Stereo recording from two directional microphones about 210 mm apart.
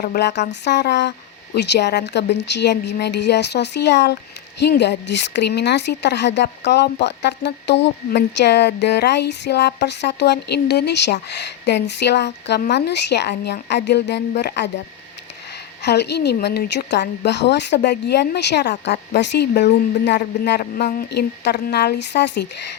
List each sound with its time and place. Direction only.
0.0 s speech: 50° left (ahead or behind)
15.8 s speech: 55° left (ahead or behind)